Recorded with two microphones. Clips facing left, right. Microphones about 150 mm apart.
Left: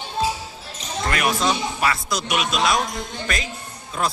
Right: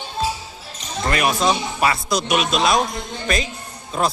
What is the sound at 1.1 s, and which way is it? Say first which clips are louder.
Speech: right 3 dB; 20° right (ahead or behind).